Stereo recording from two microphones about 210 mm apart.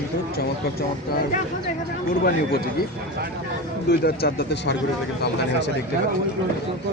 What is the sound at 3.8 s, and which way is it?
Speech, 50° left (ahead or behind).